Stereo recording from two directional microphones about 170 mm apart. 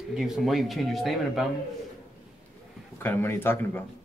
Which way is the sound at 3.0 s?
15° left (ahead or behind).